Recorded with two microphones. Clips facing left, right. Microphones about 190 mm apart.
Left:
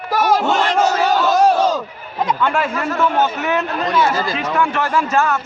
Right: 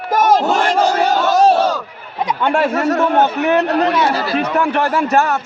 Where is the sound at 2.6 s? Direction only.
40° right (ahead or behind).